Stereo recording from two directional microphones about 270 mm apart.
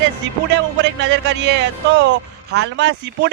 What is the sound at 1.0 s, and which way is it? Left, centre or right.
Speech, right.